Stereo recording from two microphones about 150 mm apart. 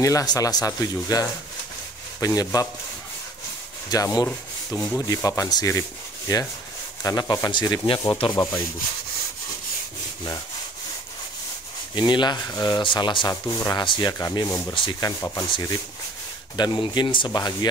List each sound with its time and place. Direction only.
0.0 s speech: 25° left (ahead or behind)
3.9 s speech: 25° left (ahead or behind)
11.9 s speech: 30° left (ahead or behind)
16.5 s speech: 30° left (ahead or behind)